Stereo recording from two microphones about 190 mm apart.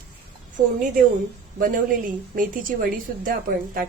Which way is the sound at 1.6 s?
45° right (ahead or behind).